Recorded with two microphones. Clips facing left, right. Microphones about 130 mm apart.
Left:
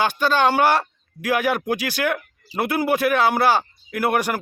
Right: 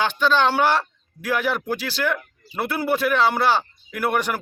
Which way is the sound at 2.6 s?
10° left (ahead or behind).